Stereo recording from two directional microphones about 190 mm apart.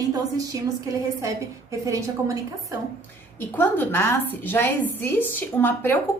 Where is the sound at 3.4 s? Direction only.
10° left (ahead or behind).